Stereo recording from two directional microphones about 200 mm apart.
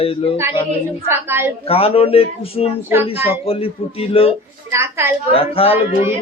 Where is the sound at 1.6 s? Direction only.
30° left (ahead or behind).